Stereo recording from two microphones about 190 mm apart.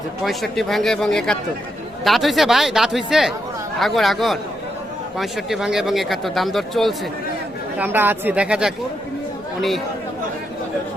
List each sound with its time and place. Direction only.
0.3 s speech: centre (ahead or behind)
7.8 s speech: 10° right (ahead or behind)